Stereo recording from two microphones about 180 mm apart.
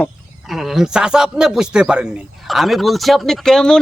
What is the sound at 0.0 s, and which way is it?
Speech, centre (ahead or behind).